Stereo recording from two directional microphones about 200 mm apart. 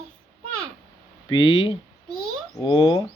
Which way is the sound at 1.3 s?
25° left (ahead or behind).